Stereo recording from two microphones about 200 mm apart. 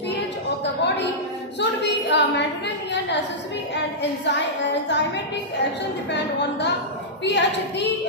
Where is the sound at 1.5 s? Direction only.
60° left (ahead or behind).